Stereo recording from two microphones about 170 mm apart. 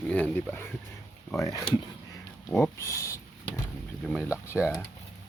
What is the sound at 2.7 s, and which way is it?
Speech, 20° left (ahead or behind).